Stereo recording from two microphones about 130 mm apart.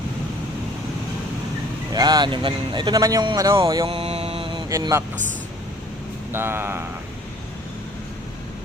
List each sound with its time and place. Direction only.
1.9 s speech: 30° right (ahead or behind)
3.8 s mantra: 50° right (ahead or behind)
4.7 s speech: 25° right (ahead or behind)
6.3 s speech: 15° right (ahead or behind)